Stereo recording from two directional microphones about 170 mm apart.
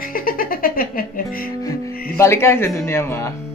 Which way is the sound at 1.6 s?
20° left (ahead or behind).